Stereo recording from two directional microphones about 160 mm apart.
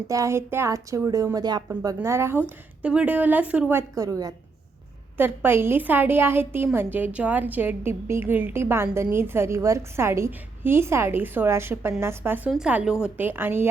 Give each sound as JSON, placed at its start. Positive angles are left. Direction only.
{"t": 0.1, "sound": "a woman's voice", "side_deg": -20}